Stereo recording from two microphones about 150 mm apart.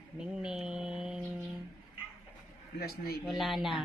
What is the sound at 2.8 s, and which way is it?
Speech, 90° left.